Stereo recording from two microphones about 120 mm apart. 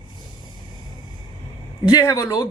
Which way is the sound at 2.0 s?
25° left (ahead or behind).